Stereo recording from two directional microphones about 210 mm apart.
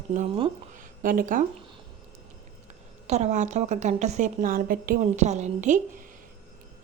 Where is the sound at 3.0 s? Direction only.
35° right (ahead or behind).